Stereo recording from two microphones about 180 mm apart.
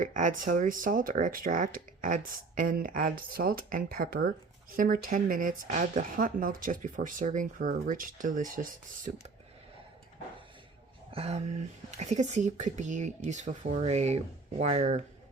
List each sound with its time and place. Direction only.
0.0 s speech: 45° right (ahead or behind)
11.1 s speech: 35° right (ahead or behind)